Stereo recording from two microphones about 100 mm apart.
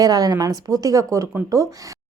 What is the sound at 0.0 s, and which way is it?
A woman's voice, 40° right (ahead or behind).